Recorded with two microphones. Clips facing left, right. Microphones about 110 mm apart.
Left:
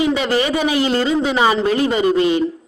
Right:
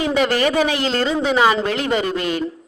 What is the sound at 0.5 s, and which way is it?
Speech, 5° left (ahead or behind).